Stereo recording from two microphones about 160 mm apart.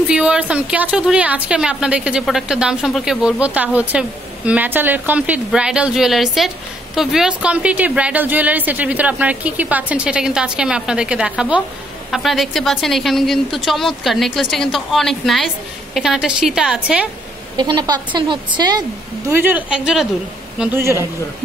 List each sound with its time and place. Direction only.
0.1 s a woman's voice: 5° right (ahead or behind)
17.6 s a woman's voice: 25° right (ahead or behind)
19.3 s a woman's voice: 10° right (ahead or behind)